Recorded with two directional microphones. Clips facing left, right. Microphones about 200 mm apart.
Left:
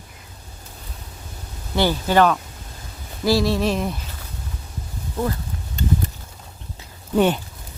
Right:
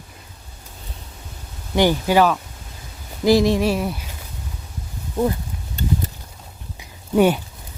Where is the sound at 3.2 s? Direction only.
20° right (ahead or behind).